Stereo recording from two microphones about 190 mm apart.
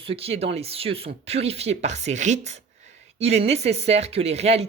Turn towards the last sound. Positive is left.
turn(degrees=-35)  # may be behind; listen again after turning